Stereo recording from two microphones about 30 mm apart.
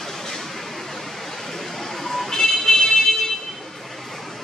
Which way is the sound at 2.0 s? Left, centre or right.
Centre.